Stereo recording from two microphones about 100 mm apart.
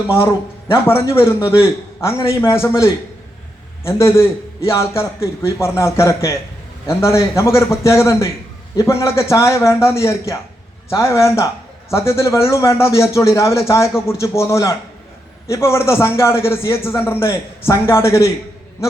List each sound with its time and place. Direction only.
1.0 s a man's voice: 25° left (ahead or behind)